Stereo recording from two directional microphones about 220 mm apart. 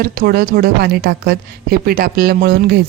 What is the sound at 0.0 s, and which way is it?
A woman's voice, 40° right (ahead or behind).